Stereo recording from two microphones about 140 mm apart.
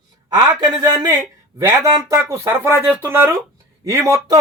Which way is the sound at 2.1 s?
20° right (ahead or behind).